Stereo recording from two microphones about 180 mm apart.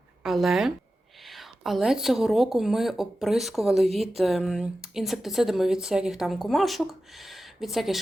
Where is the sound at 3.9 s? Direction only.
35° right (ahead or behind).